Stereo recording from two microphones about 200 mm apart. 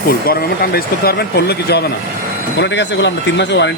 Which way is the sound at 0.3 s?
50° left (ahead or behind).